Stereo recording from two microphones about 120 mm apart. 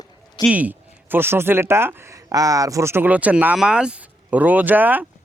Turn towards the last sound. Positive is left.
turn(degrees=-15)  # may be behind; listen again after turning